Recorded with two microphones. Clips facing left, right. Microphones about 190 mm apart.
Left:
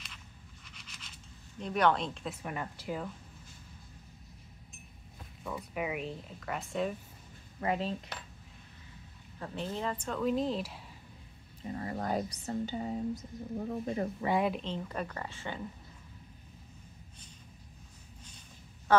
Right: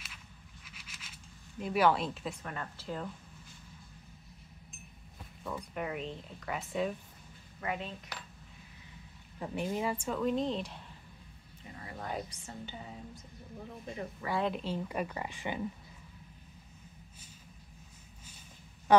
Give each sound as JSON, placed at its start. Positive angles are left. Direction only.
{"t": 0.7, "sound": "a sound", "side_deg": -5}
{"t": 1.6, "sound": "speech", "side_deg": -5}
{"t": 2.4, "sound": "speech", "side_deg": 15}
{"t": 5.4, "sound": "speech", "side_deg": 5}
{"t": 7.6, "sound": "speech", "side_deg": 35}
{"t": 9.4, "sound": "speech", "side_deg": -10}
{"t": 11.6, "sound": "speech", "side_deg": 40}
{"t": 14.6, "sound": "speech", "side_deg": -10}
{"t": 18.9, "sound": "a sound", "side_deg": -15}